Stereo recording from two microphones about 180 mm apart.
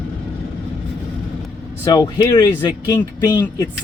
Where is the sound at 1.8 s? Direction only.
20° left (ahead or behind).